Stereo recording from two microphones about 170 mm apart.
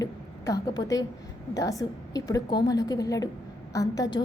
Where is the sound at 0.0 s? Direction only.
20° left (ahead or behind).